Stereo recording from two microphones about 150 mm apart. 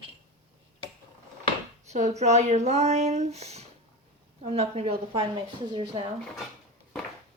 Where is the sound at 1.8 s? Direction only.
50° right (ahead or behind); by 6.1 s 30° right (ahead or behind).